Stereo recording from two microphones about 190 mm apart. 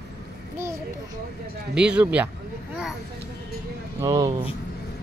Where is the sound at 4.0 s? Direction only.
20° right (ahead or behind).